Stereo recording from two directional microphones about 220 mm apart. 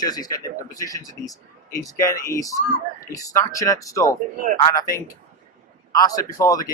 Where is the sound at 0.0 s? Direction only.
15° left (ahead or behind).